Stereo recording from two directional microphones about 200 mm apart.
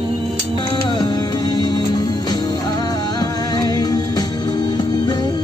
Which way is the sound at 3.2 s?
20° left (ahead or behind).